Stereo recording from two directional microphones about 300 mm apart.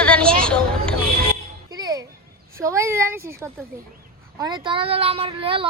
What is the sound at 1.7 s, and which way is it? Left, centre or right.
Music, centre.